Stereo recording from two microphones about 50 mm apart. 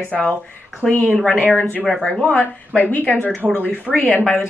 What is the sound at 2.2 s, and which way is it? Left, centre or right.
Speech, left.